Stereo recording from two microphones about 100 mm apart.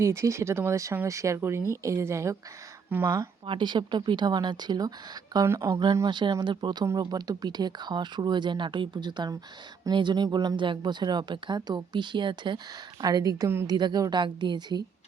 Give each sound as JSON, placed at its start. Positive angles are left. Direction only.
{"t": 0.0, "sound": "speech", "side_deg": -30}
{"t": 2.9, "sound": "speech", "side_deg": -20}
{"t": 3.4, "sound": "speech", "side_deg": -55}
{"t": 5.5, "sound": "speech", "side_deg": -30}
{"t": 5.8, "sound": "speech", "side_deg": -40}
{"t": 10.2, "sound": "a woman's voice", "side_deg": -40}
{"t": 13.0, "sound": "a woman's voice", "side_deg": -40}